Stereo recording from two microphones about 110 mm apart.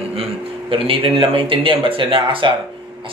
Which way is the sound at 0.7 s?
55° right (ahead or behind).